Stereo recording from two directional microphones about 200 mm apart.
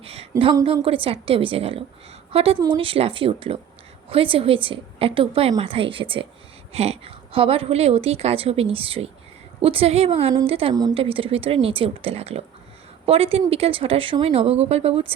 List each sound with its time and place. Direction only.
0.0 s a woman's voice: 30° right (ahead or behind)